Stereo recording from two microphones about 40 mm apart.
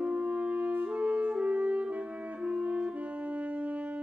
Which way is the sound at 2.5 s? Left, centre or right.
Right.